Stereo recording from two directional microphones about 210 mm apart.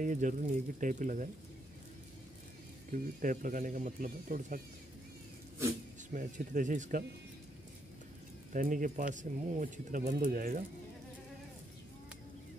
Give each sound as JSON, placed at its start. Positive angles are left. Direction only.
{"t": 0.0, "sound": "speech", "side_deg": -40}
{"t": 2.9, "sound": "speech", "side_deg": -40}
{"t": 6.1, "sound": "speech", "side_deg": -40}
{"t": 8.5, "sound": "speech", "side_deg": -40}